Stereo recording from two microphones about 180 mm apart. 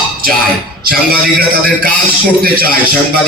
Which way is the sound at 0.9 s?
55° right (ahead or behind).